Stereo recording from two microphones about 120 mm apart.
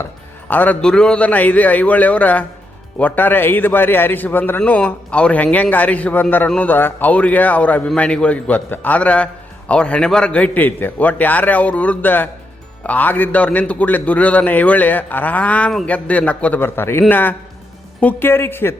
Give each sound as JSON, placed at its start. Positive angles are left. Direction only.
{"t": 0.0, "sound": "a man's voice", "side_deg": 15}